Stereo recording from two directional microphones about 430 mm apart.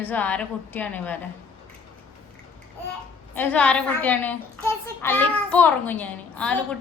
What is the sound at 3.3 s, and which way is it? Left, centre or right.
A child's voice, centre.